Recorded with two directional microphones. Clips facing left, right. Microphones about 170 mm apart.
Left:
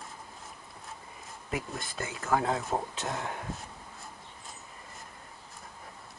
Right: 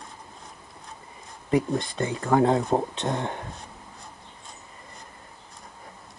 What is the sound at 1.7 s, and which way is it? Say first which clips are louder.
Speech: right 10 dB; 5° left (ahead or behind).